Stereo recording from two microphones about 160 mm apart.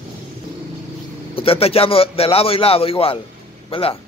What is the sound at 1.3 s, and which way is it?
A man's voice, 35° left (ahead or behind).